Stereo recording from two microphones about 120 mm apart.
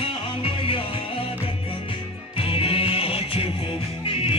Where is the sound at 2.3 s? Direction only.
50° left (ahead or behind).